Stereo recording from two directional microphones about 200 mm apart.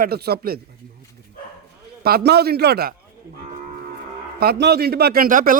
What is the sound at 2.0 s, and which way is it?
Speech, 55° right (ahead or behind).